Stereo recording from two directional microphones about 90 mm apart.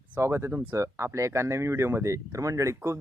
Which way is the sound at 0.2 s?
30° right (ahead or behind).